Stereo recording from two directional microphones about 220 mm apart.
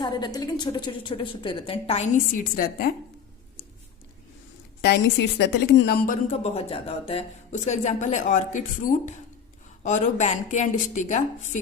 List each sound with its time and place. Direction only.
0.0 s a woman's voice: 20° left (ahead or behind); by 2.9 s 40° left (ahead or behind)
4.8 s a woman's voice: 50° left (ahead or behind)
6.3 s speech: 30° left (ahead or behind)